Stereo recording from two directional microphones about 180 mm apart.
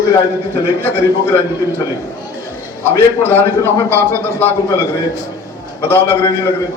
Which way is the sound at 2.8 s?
10° left (ahead or behind).